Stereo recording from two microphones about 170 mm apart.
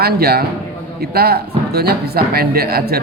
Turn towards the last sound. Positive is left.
turn(degrees=-65)  # may be behind; listen again after turning